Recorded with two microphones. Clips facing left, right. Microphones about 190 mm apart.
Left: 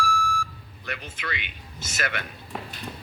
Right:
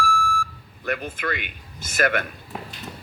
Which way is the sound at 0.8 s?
50° right (ahead or behind).